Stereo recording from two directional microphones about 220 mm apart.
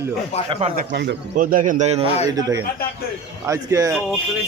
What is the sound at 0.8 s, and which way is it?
A man's voice, 40° right (ahead or behind).